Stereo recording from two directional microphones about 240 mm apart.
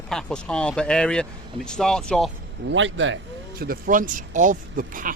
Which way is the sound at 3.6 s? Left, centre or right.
Right.